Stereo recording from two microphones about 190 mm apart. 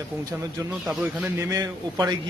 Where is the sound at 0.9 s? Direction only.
15° right (ahead or behind).